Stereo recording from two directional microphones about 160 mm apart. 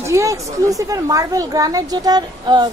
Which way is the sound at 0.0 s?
20° right (ahead or behind).